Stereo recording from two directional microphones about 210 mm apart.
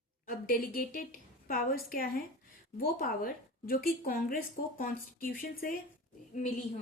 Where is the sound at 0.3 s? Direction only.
45° left (ahead or behind).